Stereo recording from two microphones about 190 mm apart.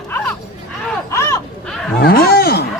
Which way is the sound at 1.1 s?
15° left (ahead or behind).